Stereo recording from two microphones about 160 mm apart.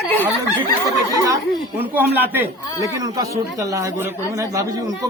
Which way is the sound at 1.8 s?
10° right (ahead or behind).